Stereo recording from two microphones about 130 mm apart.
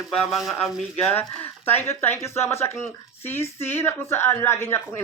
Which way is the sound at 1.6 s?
15° left (ahead or behind).